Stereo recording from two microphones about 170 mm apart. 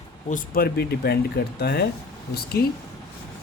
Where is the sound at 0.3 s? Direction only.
55° left (ahead or behind); by 1.8 s 70° left (ahead or behind).